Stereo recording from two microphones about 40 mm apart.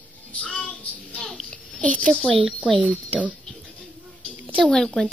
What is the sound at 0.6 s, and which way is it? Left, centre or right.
Child singing, left.